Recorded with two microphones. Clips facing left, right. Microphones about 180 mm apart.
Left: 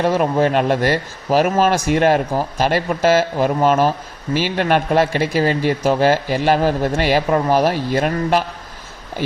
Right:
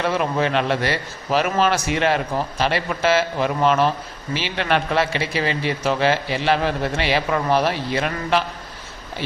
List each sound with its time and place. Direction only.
0.0 s speech: 45° left (ahead or behind)